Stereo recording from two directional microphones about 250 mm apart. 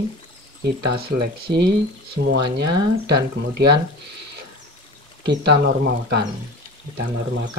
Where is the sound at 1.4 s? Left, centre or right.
Right.